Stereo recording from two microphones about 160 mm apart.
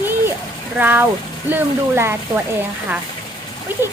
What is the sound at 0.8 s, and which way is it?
Speech, 10° right (ahead or behind).